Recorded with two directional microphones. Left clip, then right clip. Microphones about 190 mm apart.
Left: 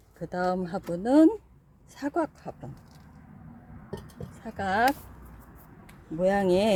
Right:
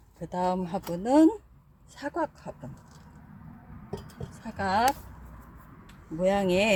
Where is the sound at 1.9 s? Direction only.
40° left (ahead or behind).